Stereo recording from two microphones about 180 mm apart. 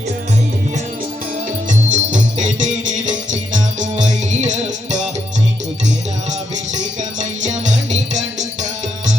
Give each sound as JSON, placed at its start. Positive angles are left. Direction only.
{"t": 1.9, "sound": "music", "side_deg": -45}
{"t": 6.7, "sound": "music", "side_deg": -40}